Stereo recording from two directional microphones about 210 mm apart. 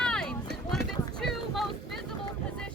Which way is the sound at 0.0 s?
5° left (ahead or behind).